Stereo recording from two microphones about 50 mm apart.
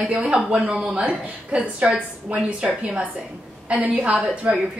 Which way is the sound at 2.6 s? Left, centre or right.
Centre.